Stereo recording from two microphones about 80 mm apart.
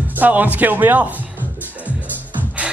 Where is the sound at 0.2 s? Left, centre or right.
Right.